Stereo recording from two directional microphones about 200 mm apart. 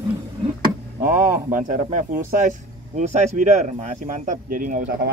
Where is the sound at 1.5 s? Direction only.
40° right (ahead or behind).